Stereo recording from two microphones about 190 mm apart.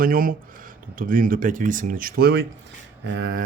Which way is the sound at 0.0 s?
50° right (ahead or behind).